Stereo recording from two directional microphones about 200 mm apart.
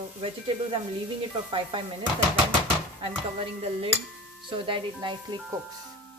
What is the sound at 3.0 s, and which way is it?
Dishes, 30° right (ahead or behind).